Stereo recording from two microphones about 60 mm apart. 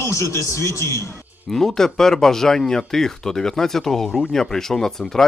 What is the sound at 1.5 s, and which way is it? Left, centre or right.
Speech, centre.